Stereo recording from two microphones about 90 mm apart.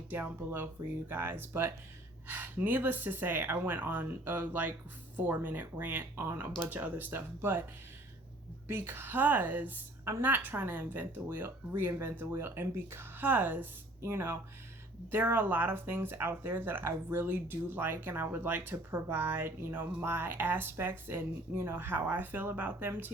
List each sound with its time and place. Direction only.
0.1 s speech: 20° right (ahead or behind)
8.6 s speech: 25° right (ahead or behind)